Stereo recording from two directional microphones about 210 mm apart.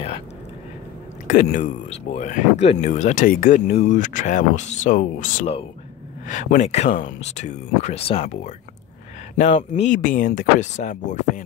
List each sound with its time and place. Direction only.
1.2 s speech: 40° left (ahead or behind)